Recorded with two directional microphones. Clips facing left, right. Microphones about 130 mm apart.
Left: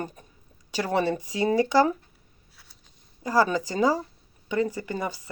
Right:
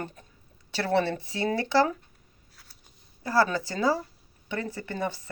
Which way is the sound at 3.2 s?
15° left (ahead or behind).